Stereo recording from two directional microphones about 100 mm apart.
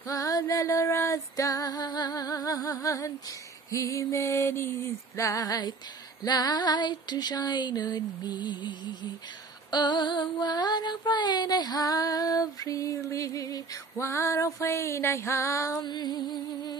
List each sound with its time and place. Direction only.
0.0 s female singing: 30° left (ahead or behind); by 9.1 s 50° left (ahead or behind)
9.7 s child singing: 45° left (ahead or behind)